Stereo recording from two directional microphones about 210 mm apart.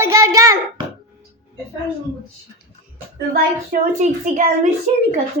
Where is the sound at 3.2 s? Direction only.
45° right (ahead or behind).